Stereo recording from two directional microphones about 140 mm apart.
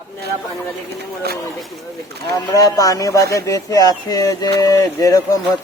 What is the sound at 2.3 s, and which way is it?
Speech, 25° left (ahead or behind).